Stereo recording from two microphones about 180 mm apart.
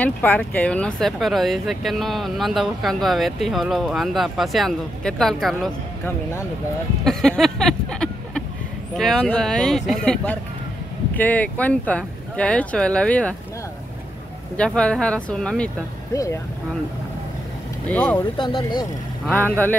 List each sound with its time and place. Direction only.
0.0 s speech: 10° left (ahead or behind)
7.1 s a sound: centre (ahead or behind)
8.9 s speech: centre (ahead or behind)
14.6 s speech: 5° left (ahead or behind)
16.1 s speech: 20° left (ahead or behind)
17.8 s speech: 10° left (ahead or behind)
18.4 s speech: 25° left (ahead or behind)
19.2 s speech: 10° left (ahead or behind)